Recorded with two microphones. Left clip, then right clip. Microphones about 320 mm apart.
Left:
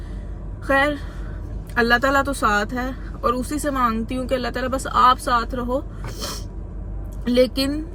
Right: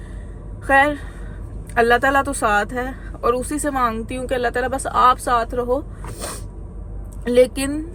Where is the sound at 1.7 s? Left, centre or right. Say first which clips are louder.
Right 2 dB; right.